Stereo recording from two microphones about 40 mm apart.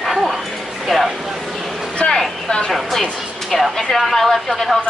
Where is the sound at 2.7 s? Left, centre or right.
Centre.